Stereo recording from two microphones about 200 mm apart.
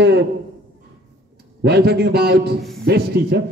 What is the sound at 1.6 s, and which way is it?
A man's voice, 55° right (ahead or behind).